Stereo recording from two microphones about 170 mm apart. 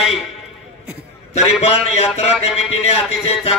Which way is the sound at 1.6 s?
35° left (ahead or behind).